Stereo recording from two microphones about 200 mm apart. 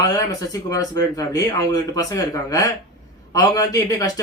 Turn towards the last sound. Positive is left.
turn(degrees=15)  # may be behind; listen again after turning